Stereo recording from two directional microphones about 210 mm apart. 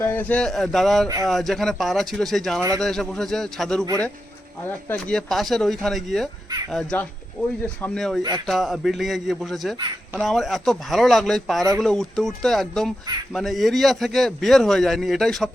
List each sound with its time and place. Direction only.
0.0 s a man's voice: 10° left (ahead or behind)
1.0 s speech: 15° right (ahead or behind)
1.3 s a man's voice: centre (ahead or behind)
2.6 s speech: 15° right (ahead or behind)
2.8 s a man's voice: centre (ahead or behind)
4.9 s a man's voice: 5° left (ahead or behind)